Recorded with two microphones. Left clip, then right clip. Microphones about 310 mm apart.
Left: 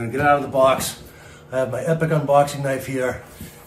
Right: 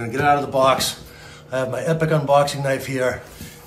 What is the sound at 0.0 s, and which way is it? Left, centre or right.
A man's voice, centre.